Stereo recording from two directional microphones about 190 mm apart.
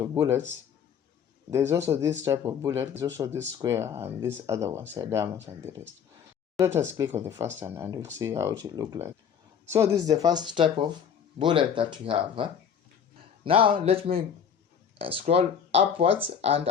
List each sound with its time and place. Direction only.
0.0 s speech: 15° right (ahead or behind)
1.5 s speech: 15° right (ahead or behind); by 16.6 s 30° right (ahead or behind)